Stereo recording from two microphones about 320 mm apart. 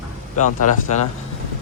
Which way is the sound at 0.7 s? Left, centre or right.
Left.